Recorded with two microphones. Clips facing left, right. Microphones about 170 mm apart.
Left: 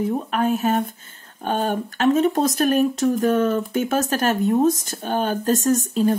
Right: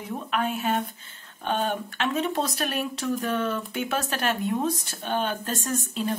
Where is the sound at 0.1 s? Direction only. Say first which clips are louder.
Left 7 dB; 40° left (ahead or behind).